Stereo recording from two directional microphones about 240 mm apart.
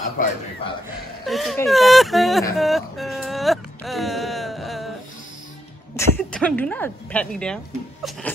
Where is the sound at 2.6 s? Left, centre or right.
Centre.